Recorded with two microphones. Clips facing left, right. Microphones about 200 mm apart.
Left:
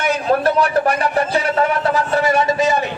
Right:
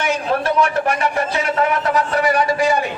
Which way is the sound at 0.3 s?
45° left (ahead or behind).